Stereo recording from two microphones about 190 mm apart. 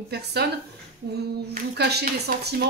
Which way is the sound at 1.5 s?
60° right (ahead or behind).